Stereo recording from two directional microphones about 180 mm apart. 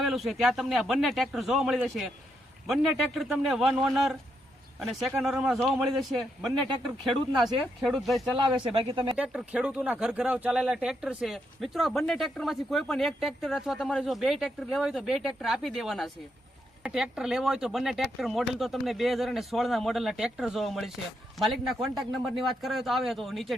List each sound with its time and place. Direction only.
0.0 s speech: centre (ahead or behind)
8.7 s speech: 30° right (ahead or behind)
9.1 s speech: 5° right (ahead or behind)